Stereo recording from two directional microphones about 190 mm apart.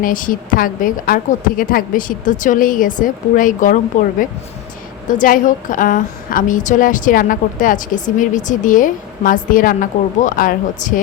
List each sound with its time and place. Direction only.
0.0 s a woman's voice: 45° left (ahead or behind)
5.0 s a woman's voice: 45° left (ahead or behind)